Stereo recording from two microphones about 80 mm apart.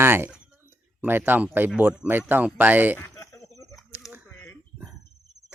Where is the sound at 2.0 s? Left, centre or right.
Right.